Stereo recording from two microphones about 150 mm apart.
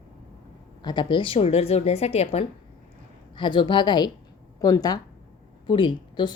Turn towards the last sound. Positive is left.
turn(degrees=30)  # may be behind; listen again after turning